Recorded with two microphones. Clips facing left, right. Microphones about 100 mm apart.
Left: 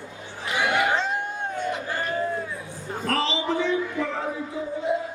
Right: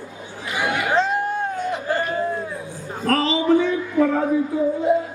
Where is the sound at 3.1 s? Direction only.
45° right (ahead or behind).